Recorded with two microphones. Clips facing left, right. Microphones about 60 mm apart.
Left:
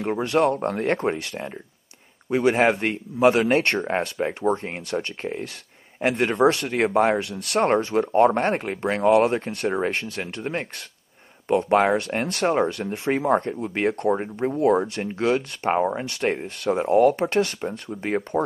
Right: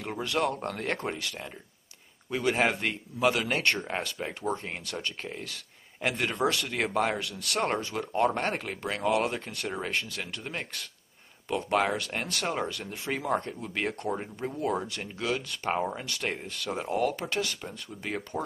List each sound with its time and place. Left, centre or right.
0.0 s speech: left
15.7 s speech: left